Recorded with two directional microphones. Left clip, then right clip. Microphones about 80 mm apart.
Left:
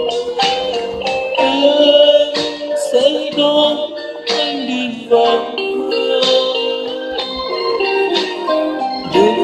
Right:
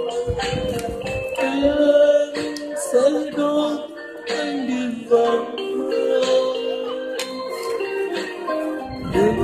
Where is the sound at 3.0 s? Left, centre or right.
Left.